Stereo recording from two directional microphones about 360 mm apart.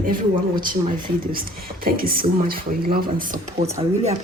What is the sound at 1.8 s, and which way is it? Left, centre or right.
Speech, right.